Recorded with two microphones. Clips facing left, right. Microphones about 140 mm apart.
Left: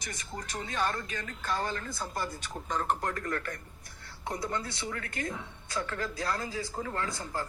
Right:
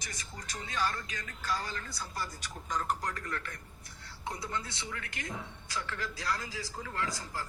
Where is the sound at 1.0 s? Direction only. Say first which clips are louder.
Left 5 dB; 35° left (ahead or behind).